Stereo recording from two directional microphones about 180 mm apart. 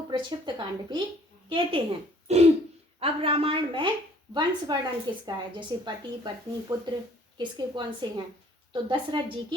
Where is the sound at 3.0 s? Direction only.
30° right (ahead or behind).